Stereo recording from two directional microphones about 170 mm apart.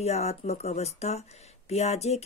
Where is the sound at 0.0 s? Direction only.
40° left (ahead or behind).